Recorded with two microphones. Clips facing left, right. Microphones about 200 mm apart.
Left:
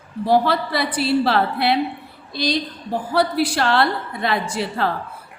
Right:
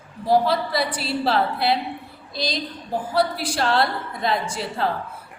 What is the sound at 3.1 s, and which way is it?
A woman's voice, 65° left (ahead or behind).